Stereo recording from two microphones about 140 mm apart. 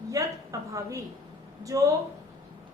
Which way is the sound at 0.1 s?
25° right (ahead or behind).